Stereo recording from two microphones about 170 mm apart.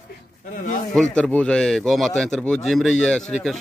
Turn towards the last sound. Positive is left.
turn(degrees=5)  # may be behind; listen again after turning